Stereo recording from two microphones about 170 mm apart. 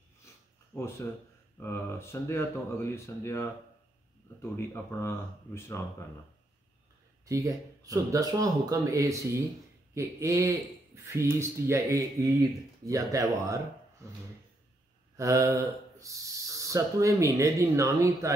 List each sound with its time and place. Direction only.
0.7 s speech: 15° left (ahead or behind)
7.2 s speech: 20° right (ahead or behind)
15.1 s speech: 20° right (ahead or behind)